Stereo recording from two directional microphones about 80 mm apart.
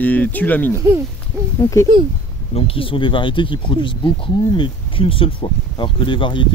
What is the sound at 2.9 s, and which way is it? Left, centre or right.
Speech, left.